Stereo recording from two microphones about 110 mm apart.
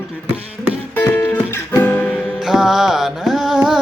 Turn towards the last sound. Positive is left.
turn(degrees=-5)  # may be behind; listen again after turning